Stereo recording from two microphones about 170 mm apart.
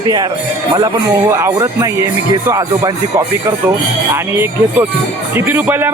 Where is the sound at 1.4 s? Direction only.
20° right (ahead or behind).